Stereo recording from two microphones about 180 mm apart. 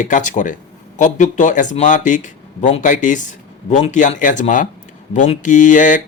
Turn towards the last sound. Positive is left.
turn(degrees=45)  # may be behind; listen again after turning